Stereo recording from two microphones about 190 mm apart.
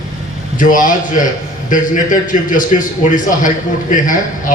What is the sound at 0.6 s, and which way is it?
A man's voice, 45° left (ahead or behind).